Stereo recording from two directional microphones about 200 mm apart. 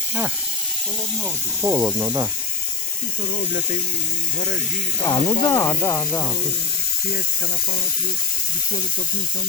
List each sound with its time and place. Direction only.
1.6 s speech: 20° right (ahead or behind)
5.0 s speech: 20° left (ahead or behind)